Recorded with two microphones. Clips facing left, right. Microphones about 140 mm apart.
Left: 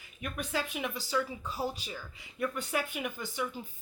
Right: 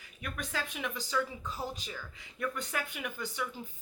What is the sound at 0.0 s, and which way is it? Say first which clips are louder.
Speech: left 2 dB; 15° left (ahead or behind).